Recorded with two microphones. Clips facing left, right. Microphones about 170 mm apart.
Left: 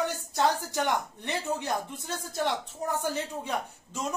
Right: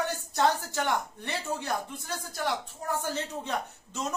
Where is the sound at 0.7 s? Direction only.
15° left (ahead or behind).